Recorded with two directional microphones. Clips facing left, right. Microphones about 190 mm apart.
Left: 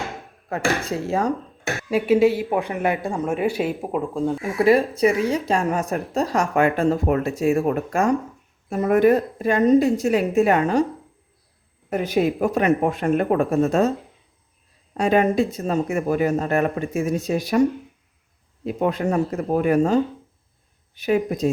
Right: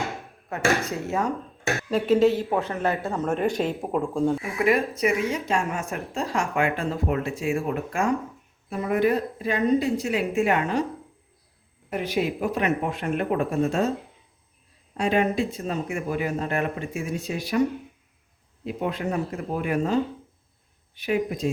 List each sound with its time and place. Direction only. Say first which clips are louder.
0.9 s speech: left 4 dB; 30° left (ahead or behind)
1.9 s speech: left 3 dB; 10° left (ahead or behind)
4.5 s speech: left 5 dB; 35° left (ahead or behind)
11.9 s speech: left 5 dB; 40° left (ahead or behind)
14.9 s speech: left 5 dB; 45° left (ahead or behind)
18.6 s speech: left 6 dB; 45° left (ahead or behind)